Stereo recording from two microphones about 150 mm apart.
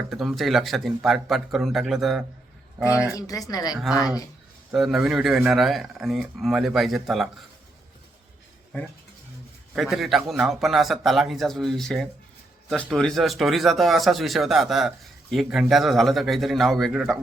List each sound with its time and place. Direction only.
0.1 s speech: centre (ahead or behind)
3.2 s speech: 25° left (ahead or behind)
4.7 s speech: 5° right (ahead or behind)
9.7 s speech: centre (ahead or behind)